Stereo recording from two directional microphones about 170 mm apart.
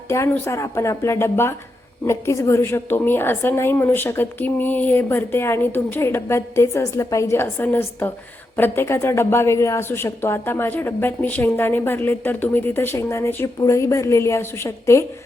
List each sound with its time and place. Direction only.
0.1 s a woman's voice: 15° left (ahead or behind)